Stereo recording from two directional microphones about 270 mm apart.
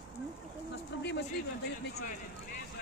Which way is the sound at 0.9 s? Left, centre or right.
Left.